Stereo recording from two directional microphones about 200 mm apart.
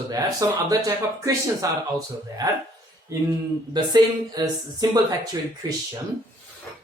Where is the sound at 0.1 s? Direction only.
20° right (ahead or behind).